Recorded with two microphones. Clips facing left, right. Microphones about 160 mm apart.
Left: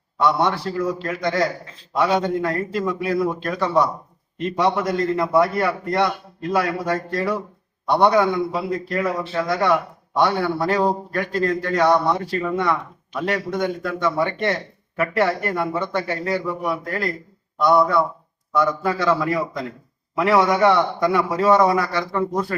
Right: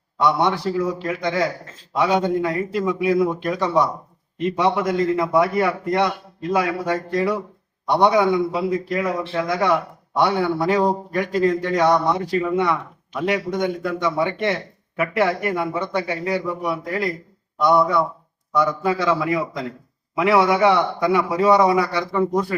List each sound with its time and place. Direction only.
0.2 s a man's voice: 15° right (ahead or behind)
9.4 s speech: centre (ahead or behind)
10.2 s a man's voice: 10° right (ahead or behind)